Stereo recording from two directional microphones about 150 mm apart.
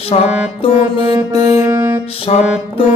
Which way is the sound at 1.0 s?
30° right (ahead or behind).